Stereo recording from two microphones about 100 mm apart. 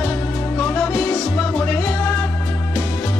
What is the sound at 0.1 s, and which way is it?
Music, 20° left (ahead or behind).